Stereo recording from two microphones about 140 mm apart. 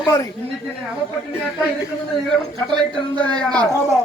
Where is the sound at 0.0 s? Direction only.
25° left (ahead or behind).